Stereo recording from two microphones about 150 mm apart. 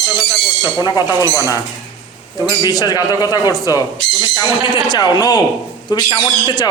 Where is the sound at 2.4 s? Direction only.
25° left (ahead or behind).